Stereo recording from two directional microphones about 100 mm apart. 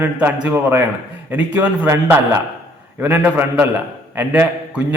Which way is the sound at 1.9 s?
30° right (ahead or behind).